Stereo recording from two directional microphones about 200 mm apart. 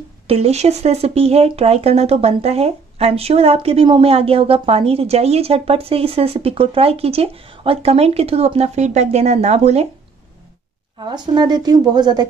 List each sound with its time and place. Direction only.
0.3 s speech: 30° right (ahead or behind)
11.0 s speech: 20° right (ahead or behind)